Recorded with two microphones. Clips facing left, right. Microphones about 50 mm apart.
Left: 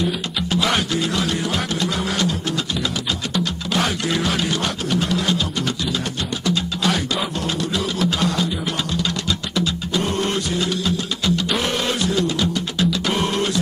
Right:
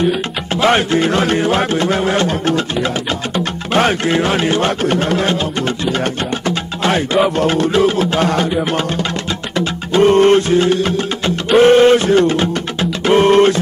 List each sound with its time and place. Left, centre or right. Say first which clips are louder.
0.6 s music: right 9 dB; right
6.4 s music: right 1 dB; right
9.6 s music: right 11 dB; right